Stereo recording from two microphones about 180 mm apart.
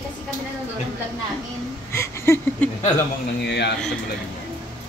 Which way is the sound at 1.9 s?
15° left (ahead or behind).